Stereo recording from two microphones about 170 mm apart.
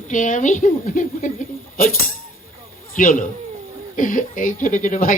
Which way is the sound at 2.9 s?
55° left (ahead or behind).